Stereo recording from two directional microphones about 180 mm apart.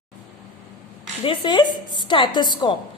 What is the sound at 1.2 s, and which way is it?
A woman's voice, 25° left (ahead or behind).